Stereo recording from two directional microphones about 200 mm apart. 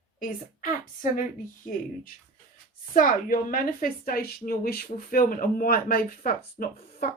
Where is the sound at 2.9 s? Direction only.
45° left (ahead or behind).